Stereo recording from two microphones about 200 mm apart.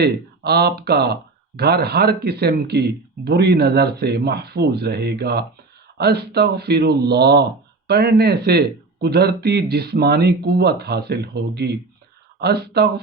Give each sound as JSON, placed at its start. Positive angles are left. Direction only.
{"t": 0.0, "sound": "speech", "side_deg": -55}